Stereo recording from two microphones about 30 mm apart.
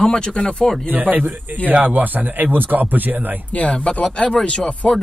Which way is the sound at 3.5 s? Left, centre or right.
Left.